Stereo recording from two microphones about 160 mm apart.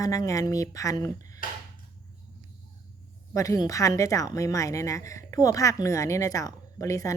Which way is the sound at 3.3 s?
20° left (ahead or behind).